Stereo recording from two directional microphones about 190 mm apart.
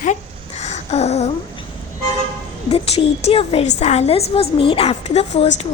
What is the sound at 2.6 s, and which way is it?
A woman's voice, 30° left (ahead or behind).